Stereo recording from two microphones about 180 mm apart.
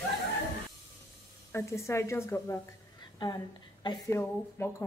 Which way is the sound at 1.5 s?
15° left (ahead or behind).